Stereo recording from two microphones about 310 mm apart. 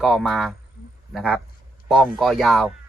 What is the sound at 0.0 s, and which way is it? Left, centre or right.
Speech, centre.